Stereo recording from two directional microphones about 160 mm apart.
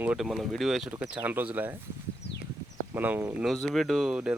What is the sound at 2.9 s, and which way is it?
Speech, 15° right (ahead or behind).